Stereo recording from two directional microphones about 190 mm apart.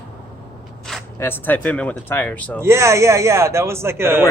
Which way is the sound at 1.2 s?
10° left (ahead or behind).